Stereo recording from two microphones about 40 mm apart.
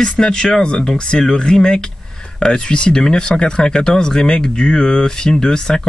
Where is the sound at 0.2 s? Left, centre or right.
Centre.